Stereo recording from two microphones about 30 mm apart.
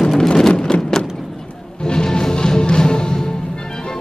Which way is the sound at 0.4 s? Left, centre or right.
Left.